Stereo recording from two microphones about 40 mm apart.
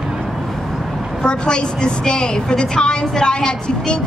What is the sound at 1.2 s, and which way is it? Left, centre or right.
A woman's voice, left.